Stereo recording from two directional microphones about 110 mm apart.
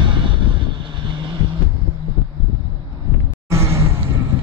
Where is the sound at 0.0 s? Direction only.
45° right (ahead or behind).